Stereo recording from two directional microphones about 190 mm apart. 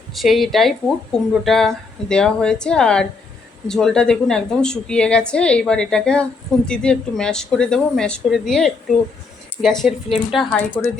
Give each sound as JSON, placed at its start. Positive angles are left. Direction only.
{"t": 0.1, "sound": "speech", "side_deg": 0}